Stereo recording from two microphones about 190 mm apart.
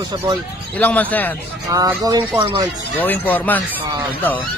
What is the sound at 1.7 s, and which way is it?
Speech, 20° right (ahead or behind).